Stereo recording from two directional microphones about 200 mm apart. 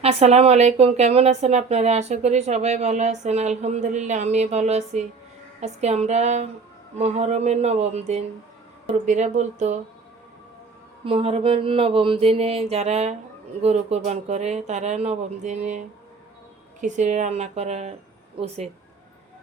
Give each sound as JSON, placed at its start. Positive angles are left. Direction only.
{"t": 0.0, "sound": "speech", "side_deg": -35}
{"t": 11.0, "sound": "a sound", "side_deg": -30}
{"t": 13.6, "sound": "speech", "side_deg": -35}
{"t": 16.8, "sound": "speech", "side_deg": -40}